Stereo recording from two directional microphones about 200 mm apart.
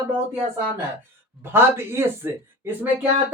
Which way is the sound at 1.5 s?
10° right (ahead or behind).